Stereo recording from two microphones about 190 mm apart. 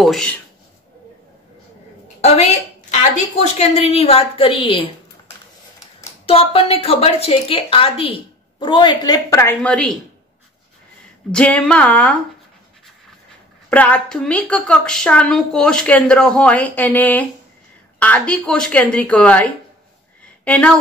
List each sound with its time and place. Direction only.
0.0 s speech: 5° left (ahead or behind)
2.2 s a woman's voice: 35° left (ahead or behind)
6.2 s a woman's voice: 30° left (ahead or behind); by 9.9 s 5° left (ahead or behind)
11.3 s a woman's voice: 5° left (ahead or behind)
13.7 s a woman's voice: 10° left (ahead or behind)